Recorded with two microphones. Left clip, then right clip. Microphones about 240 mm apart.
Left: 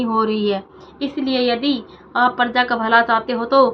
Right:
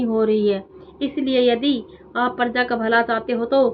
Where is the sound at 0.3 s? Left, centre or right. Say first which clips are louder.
Right 1 dB; centre.